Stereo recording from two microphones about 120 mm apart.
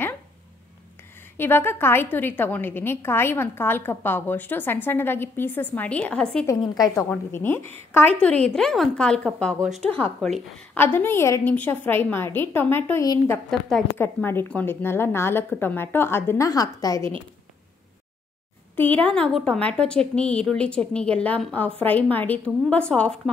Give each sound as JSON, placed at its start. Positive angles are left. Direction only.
{"t": 1.3, "sound": "a woman's voice", "side_deg": 20}
{"t": 6.6, "sound": "a woman's voice", "side_deg": 35}
{"t": 7.1, "sound": "a woman's voice", "side_deg": 20}
{"t": 8.5, "sound": "a woman's voice", "side_deg": 5}
{"t": 13.5, "sound": "a woman's voice", "side_deg": 0}
{"t": 13.9, "sound": "a woman's voice", "side_deg": 20}
{"t": 18.8, "sound": "a woman's voice", "side_deg": 15}